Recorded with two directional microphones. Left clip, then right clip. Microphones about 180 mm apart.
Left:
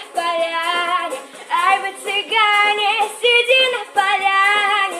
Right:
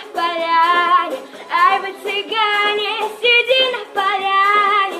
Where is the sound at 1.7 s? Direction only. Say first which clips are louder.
Left 1 dB; 45° left (ahead or behind).